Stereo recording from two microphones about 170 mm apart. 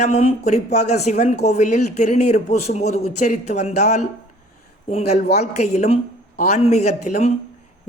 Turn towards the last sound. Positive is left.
turn(degrees=40)  # may be behind; listen again after turning